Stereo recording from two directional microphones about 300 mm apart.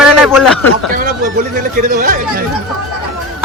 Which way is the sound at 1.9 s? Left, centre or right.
Right.